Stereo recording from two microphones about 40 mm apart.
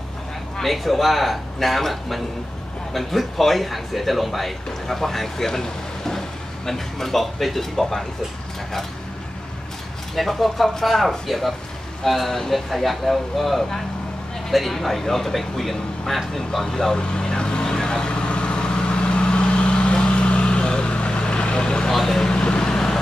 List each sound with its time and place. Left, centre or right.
0.6 s speech: centre
10.1 s speech: centre
14.5 s a sound: centre; by 21.9 s left
21.9 s vehicle: centre